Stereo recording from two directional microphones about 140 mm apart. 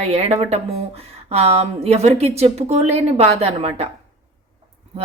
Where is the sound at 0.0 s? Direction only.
45° right (ahead or behind).